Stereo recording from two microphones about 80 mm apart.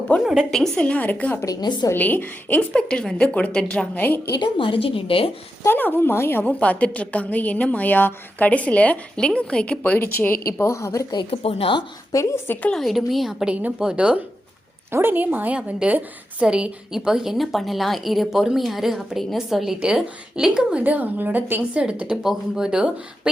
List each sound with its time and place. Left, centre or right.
0.1 s a woman's voice: centre
1.6 s a woman's voice: left
1.9 s a woman's voice: left
4.4 s a woman's voice: left
5.6 s a woman's voice: left
6.4 s a woman's voice: centre; by 11.0 s left
11.3 s a woman's voice: left
12.1 s a woman's voice: left
12.7 s a woman's voice: centre
13.5 s a woman's voice: centre
14.8 s a woman's voice: right
21.8 s a woman's voice: centre